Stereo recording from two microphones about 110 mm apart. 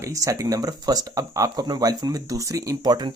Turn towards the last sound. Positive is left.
turn(degrees=-40)  # may be behind; listen again after turning